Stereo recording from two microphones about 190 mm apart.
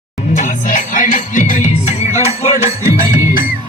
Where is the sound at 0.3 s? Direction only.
45° left (ahead or behind).